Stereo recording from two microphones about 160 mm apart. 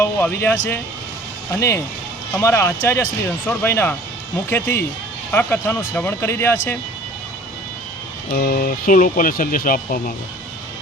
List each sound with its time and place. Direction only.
0.0 s speech: 15° left (ahead or behind)
8.3 s speech: 60° left (ahead or behind)